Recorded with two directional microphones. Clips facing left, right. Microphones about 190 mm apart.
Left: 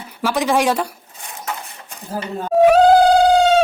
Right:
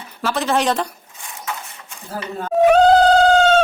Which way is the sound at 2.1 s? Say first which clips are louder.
Left 2 dB; 15° left (ahead or behind).